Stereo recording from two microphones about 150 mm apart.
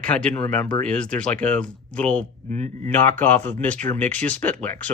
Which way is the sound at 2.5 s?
50° right (ahead or behind).